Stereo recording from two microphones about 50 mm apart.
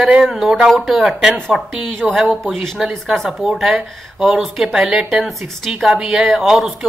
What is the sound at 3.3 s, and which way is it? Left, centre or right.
Speech, centre.